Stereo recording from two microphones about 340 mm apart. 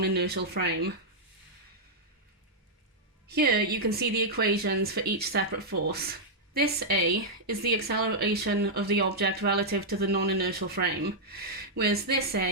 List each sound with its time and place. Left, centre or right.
0.0 s speech: right
3.2 s speech: right